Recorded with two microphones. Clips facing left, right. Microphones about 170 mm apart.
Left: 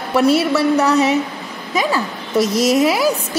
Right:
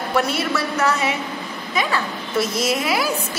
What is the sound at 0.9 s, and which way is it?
A woman's voice, 40° left (ahead or behind).